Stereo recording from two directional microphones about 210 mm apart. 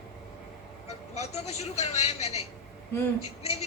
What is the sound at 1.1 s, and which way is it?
Speech, 30° left (ahead or behind).